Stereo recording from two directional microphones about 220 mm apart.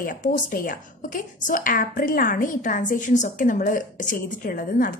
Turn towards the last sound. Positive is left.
turn(degrees=40)  # may be behind; listen again after turning